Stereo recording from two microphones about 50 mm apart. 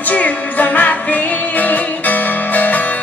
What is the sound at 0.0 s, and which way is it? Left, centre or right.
Music, left.